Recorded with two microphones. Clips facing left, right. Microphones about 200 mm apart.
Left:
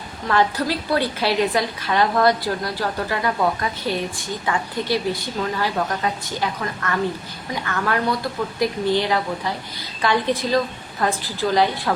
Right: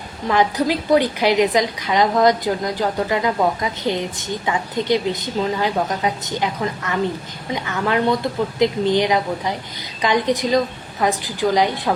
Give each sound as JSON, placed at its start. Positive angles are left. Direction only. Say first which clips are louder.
{"t": 0.3, "sound": "a woman's voice", "louder": "right 2 dB", "side_deg": -15}